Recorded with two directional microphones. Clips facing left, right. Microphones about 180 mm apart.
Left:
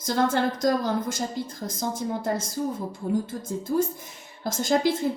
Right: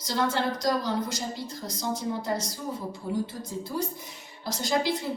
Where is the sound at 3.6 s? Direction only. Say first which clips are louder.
Left 7 dB; 50° left (ahead or behind).